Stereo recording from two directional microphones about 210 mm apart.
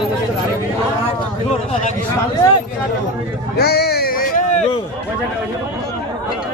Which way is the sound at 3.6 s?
50° left (ahead or behind).